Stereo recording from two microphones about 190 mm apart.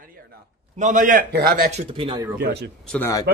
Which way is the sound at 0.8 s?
45° right (ahead or behind).